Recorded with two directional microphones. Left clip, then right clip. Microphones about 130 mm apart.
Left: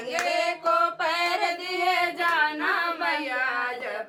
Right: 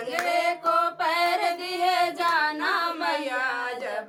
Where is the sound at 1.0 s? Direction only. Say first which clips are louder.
Right 1 dB; 20° left (ahead or behind).